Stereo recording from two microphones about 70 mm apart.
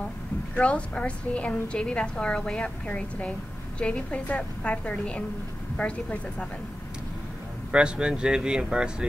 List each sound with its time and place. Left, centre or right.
0.6 s a woman's voice: centre
7.7 s speech: centre